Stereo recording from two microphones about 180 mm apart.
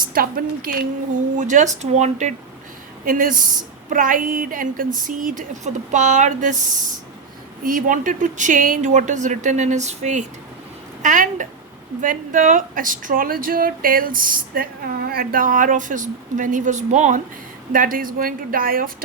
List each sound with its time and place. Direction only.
0.1 s speech: 55° right (ahead or behind)